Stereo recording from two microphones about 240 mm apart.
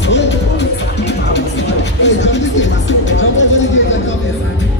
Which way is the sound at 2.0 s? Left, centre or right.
Left.